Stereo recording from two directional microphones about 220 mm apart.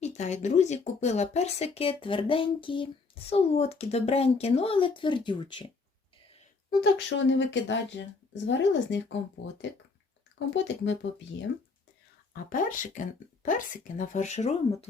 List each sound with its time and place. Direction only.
0.0 s speech: 30° left (ahead or behind)
6.7 s speech: 55° left (ahead or behind)
12.3 s speech: 40° left (ahead or behind)